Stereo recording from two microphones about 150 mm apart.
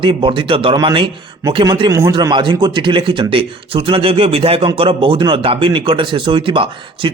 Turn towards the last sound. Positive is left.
turn(degrees=-35)  # may be behind; listen again after turning